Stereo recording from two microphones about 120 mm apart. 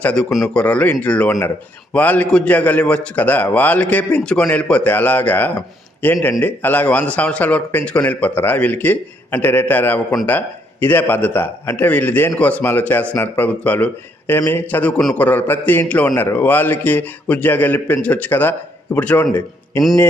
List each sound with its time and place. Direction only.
0.0 s a man's voice: 10° left (ahead or behind)